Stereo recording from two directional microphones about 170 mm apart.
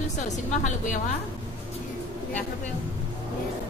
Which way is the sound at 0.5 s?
45° left (ahead or behind).